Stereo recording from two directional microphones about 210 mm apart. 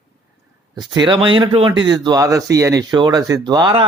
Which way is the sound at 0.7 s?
20° right (ahead or behind).